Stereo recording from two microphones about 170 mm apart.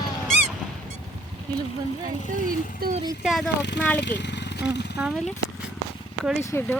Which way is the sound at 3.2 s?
5° right (ahead or behind).